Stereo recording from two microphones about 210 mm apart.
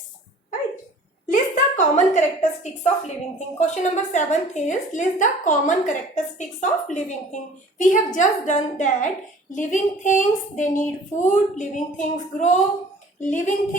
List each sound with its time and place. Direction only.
1.3 s a woman's voice: 35° left (ahead or behind)